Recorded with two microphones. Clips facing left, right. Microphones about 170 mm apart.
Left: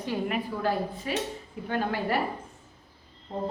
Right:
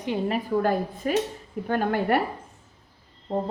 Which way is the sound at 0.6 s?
50° right (ahead or behind).